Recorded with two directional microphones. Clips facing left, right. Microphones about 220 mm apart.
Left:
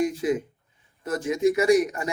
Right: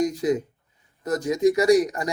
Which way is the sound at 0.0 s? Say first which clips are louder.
Right 2 dB; 40° right (ahead or behind).